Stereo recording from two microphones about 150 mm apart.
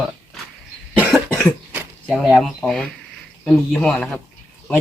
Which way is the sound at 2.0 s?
Centre (ahead or behind).